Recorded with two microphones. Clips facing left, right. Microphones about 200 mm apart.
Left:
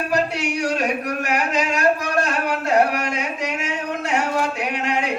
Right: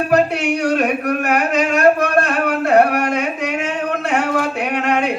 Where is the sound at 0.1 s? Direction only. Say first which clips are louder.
Right 6 dB; 60° right (ahead or behind).